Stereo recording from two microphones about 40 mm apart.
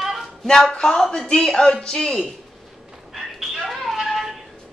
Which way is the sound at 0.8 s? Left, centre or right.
Centre.